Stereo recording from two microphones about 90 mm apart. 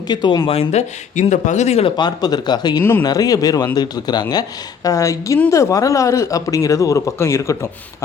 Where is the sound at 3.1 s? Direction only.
45° left (ahead or behind).